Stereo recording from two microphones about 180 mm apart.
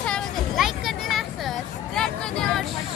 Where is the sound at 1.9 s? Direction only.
5° left (ahead or behind).